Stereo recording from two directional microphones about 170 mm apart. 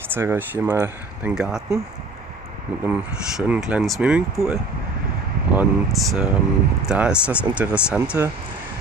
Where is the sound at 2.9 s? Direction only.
10° right (ahead or behind).